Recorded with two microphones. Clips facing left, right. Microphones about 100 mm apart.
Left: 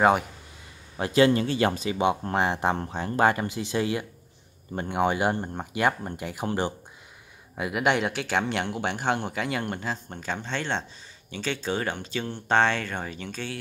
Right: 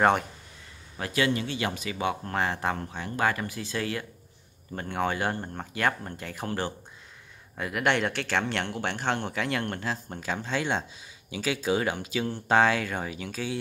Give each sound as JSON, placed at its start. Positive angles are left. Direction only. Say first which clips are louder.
{"t": 0.9, "sound": "a man's voice", "louder": "left 7 dB", "side_deg": 30}
{"t": 2.0, "sound": "speech", "louder": "left 3 dB", "side_deg": 20}
{"t": 2.8, "sound": "speech", "louder": "left 5 dB", "side_deg": 30}